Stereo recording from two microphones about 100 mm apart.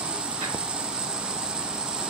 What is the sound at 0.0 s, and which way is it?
Vehicle, 10° right (ahead or behind).